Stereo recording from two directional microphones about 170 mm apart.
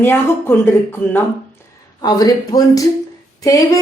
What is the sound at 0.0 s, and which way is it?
Speech, 15° left (ahead or behind).